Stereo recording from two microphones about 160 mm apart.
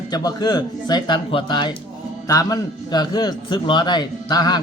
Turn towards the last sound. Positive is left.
turn(degrees=25)  # may be behind; listen again after turning